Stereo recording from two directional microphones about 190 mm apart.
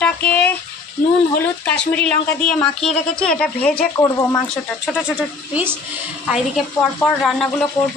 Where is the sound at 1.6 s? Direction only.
5° left (ahead or behind).